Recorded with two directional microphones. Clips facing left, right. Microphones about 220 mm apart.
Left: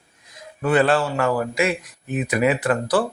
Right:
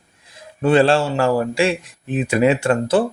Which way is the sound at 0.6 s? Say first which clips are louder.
Right 4 dB; 30° right (ahead or behind).